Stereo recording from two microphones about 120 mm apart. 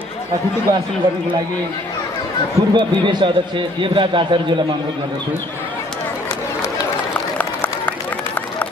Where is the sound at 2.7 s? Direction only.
40° right (ahead or behind).